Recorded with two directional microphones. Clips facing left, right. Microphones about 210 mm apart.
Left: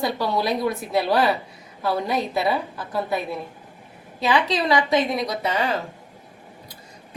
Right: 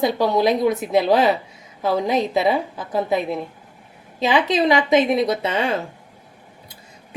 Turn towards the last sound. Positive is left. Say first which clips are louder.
# right 3 dB
turn(degrees=-25)  # may be behind; listen again after turning